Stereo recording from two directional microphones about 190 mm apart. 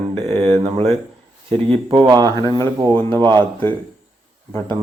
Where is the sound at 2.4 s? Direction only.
15° left (ahead or behind).